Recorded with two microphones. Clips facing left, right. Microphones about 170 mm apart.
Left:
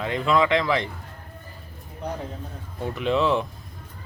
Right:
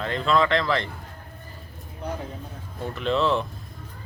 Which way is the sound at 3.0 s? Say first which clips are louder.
Left 1 dB; 10° left (ahead or behind).